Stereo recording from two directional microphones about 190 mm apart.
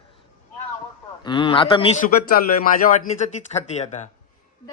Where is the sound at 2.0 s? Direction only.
50° left (ahead or behind).